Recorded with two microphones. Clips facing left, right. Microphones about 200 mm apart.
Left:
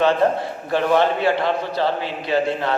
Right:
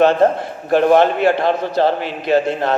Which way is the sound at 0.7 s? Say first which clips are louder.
Right 6 dB; 50° right (ahead or behind).